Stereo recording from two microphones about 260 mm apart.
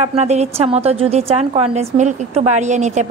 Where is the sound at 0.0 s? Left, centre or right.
Right.